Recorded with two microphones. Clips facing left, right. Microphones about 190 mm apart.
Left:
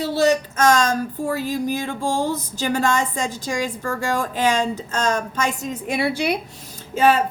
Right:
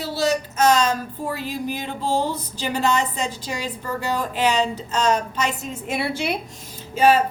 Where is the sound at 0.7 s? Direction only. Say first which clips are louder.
Left 3 dB; 45° left (ahead or behind).